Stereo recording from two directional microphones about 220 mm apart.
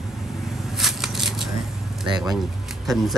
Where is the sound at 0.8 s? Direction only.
Centre (ahead or behind).